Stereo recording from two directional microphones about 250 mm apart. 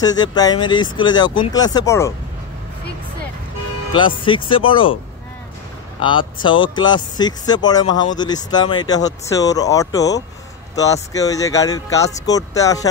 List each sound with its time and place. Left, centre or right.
0.0 s speech: centre
4.2 s speech: centre
5.9 s speech: centre